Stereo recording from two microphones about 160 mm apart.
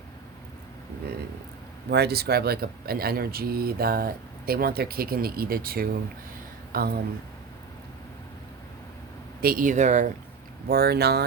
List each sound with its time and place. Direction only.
1.9 s speech: 85° right; by 7.0 s 70° right (ahead or behind)
9.4 s speech: 60° right (ahead or behind)
10.7 s speech: 75° right (ahead or behind)